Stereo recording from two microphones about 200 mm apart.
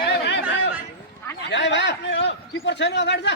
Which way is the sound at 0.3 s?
60° left (ahead or behind).